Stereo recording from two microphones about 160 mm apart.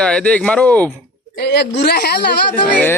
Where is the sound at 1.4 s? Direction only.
90° left.